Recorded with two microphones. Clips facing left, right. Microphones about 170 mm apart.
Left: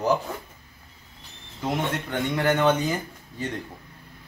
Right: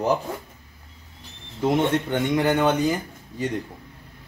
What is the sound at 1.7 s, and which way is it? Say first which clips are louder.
Speech: right 5 dB; 20° right (ahead or behind).